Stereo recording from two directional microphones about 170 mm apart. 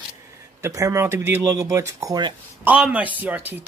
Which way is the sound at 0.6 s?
15° right (ahead or behind).